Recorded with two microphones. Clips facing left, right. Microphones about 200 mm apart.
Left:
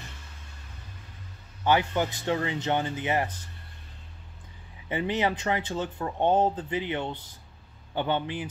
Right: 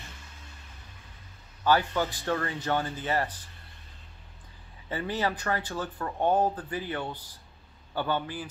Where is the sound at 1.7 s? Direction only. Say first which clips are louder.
Left 1 dB; 20° left (ahead or behind).